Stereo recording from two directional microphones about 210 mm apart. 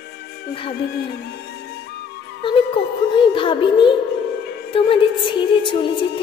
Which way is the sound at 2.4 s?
25° left (ahead or behind).